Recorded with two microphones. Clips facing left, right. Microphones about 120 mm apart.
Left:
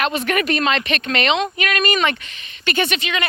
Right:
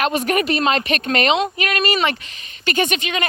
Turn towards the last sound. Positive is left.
turn(degrees=-45)  # may be behind; listen again after turning